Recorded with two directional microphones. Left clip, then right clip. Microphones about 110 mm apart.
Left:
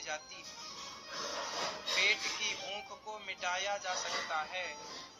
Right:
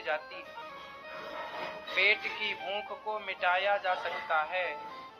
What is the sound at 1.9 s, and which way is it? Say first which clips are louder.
A man's voice: right 4 dB; 35° right (ahead or behind).